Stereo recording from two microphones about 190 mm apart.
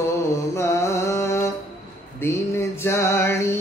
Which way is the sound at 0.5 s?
15° left (ahead or behind).